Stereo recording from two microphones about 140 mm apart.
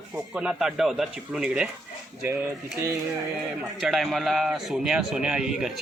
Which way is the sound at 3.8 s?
Centre (ahead or behind).